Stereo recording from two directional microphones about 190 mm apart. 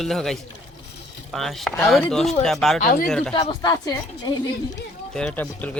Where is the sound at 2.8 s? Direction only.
50° left (ahead or behind).